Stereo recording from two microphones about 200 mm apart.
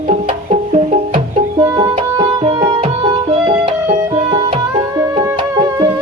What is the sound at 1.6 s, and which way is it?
Music, 20° right (ahead or behind).